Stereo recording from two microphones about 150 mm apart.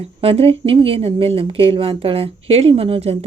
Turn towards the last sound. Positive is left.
turn(degrees=-40)  # may be behind; listen again after turning